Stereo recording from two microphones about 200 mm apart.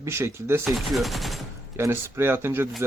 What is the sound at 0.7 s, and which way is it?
Gunshot, centre (ahead or behind).